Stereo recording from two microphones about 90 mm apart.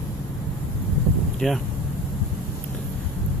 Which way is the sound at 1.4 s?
Centre (ahead or behind).